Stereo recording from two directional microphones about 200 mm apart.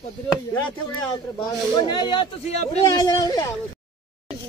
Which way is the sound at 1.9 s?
25° left (ahead or behind).